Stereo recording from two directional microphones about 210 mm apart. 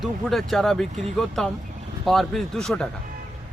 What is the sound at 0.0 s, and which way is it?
Speech, centre (ahead or behind).